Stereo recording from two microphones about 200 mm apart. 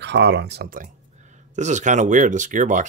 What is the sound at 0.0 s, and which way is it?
Speech, 60° right (ahead or behind).